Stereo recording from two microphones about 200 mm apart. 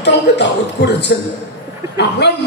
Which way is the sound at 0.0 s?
60° left (ahead or behind).